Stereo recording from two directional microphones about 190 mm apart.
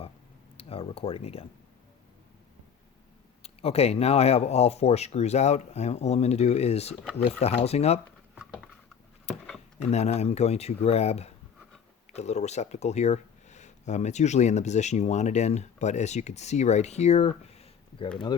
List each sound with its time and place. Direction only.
0.5 s speech: 30° left (ahead or behind)
3.4 s speech: 30° left (ahead or behind)
9.7 s speech: 35° left (ahead or behind)